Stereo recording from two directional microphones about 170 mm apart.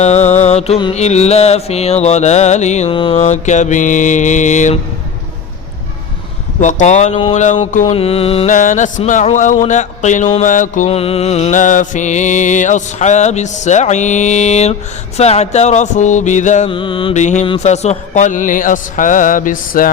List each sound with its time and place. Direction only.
0.0 s mantra: 40° left (ahead or behind)
6.6 s music: 45° left (ahead or behind)
7.9 s music: 35° left (ahead or behind); by 10.8 s 50° left (ahead or behind)
10.8 s music: 35° left (ahead or behind)
16.6 s mantra: 30° left (ahead or behind)
17.4 s music: 35° left (ahead or behind); by 19.9 s 55° left (ahead or behind)